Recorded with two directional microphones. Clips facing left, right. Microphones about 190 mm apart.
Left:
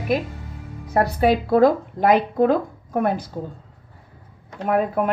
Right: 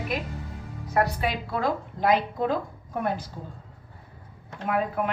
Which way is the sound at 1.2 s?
40° left (ahead or behind).